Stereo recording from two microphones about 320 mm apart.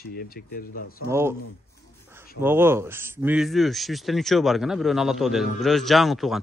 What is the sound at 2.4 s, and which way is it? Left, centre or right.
Speech, centre.